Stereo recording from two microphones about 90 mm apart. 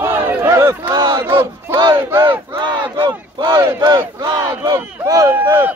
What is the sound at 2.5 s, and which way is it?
Battle cry, 55° right (ahead or behind).